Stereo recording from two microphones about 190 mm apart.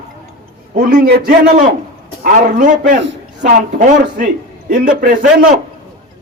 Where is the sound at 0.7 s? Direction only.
50° right (ahead or behind).